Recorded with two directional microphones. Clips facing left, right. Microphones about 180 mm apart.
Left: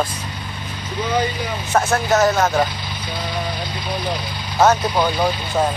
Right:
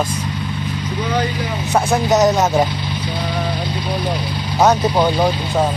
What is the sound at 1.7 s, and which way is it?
Speech, 15° right (ahead or behind).